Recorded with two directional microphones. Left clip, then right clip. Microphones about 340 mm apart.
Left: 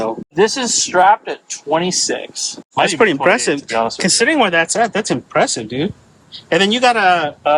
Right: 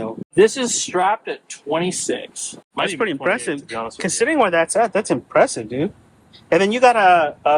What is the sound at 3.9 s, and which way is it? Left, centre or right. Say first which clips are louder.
Speech: left 1 dB; centre.